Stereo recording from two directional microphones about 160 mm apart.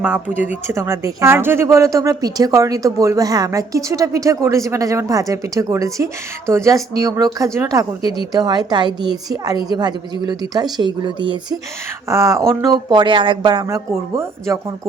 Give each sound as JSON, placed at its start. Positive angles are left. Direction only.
{"t": 0.0, "sound": "speech", "side_deg": -10}
{"t": 12.0, "sound": "speech", "side_deg": -20}